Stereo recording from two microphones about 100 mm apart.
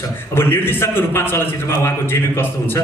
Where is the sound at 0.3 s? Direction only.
20° left (ahead or behind).